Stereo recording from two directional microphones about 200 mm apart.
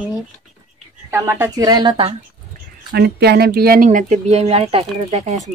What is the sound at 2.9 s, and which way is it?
Speech, 55° right (ahead or behind).